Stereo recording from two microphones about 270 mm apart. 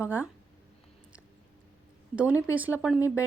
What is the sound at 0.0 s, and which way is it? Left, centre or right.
Speech, centre.